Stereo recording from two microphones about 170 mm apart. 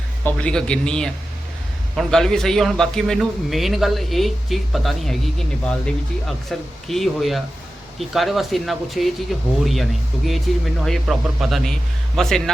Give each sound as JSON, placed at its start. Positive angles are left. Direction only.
{"t": 0.3, "sound": "a man's voice", "side_deg": 5}
{"t": 10.2, "sound": "a man's voice", "side_deg": 0}